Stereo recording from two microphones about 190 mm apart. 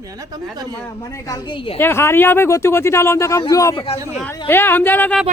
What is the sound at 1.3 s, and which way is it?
Speech, 25° left (ahead or behind).